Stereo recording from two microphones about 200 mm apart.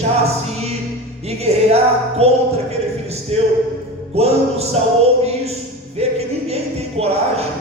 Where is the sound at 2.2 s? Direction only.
30° right (ahead or behind).